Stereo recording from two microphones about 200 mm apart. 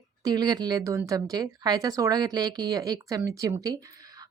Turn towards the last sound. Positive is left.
turn(degrees=-15)  # may be behind; listen again after turning